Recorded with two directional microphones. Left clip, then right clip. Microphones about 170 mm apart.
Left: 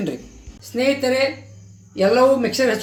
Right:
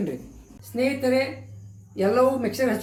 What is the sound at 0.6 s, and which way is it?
Speech, 55° left (ahead or behind).